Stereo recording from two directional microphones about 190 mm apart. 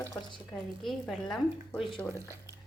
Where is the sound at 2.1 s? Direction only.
15° right (ahead or behind).